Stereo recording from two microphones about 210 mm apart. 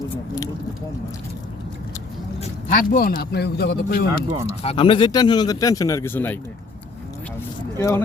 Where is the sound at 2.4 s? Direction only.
40° left (ahead or behind).